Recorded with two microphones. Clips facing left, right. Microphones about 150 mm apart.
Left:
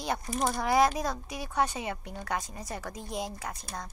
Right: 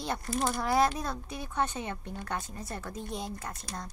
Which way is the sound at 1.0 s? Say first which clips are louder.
Left 3 dB; 90° left.